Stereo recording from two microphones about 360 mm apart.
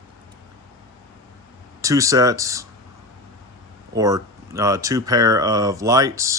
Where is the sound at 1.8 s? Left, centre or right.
Centre.